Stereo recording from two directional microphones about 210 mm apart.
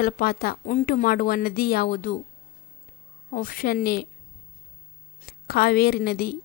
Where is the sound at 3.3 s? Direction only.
40° left (ahead or behind).